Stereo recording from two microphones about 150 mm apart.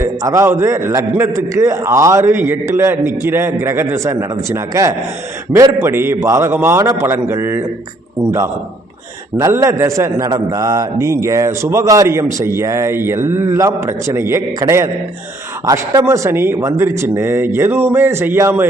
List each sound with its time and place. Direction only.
0.0 s a man's voice: 20° right (ahead or behind)